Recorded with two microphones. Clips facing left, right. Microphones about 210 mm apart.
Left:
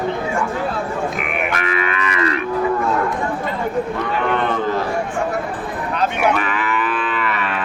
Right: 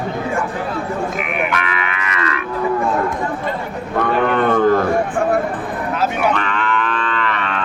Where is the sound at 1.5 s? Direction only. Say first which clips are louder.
Left 1 dB; 45° left (ahead or behind).